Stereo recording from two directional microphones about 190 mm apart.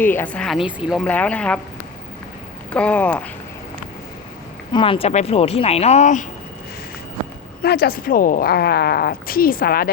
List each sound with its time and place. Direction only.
0.0 s speech: 10° left (ahead or behind)
2.7 s speech: 5° left (ahead or behind)
4.7 s speech: 25° left (ahead or behind)
7.6 s a woman's voice: 55° left (ahead or behind)